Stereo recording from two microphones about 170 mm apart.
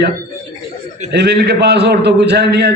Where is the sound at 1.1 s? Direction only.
75° right (ahead or behind).